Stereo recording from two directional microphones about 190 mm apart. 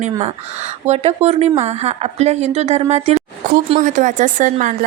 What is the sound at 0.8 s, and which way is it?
Speech, 35° right (ahead or behind).